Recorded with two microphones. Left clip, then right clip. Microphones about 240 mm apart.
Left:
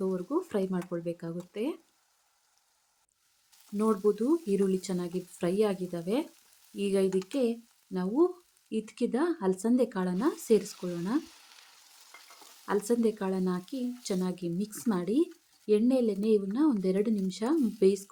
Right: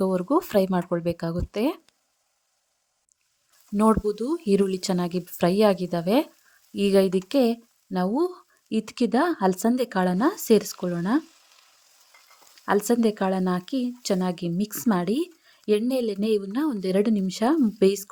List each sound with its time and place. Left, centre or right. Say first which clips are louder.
0.0 s speech: right 9 dB; right
3.8 s speech: right 5 dB; right
12.6 s speech: right 6 dB; right